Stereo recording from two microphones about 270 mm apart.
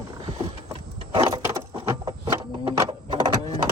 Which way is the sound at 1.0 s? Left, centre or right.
Centre.